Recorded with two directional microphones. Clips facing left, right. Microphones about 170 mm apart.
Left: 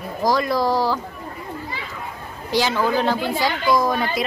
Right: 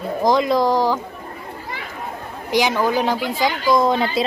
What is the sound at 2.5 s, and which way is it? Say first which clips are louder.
A woman's voice: right 2 dB; 15° right (ahead or behind).